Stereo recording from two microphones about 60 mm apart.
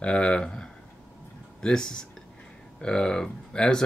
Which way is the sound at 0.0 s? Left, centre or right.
Centre.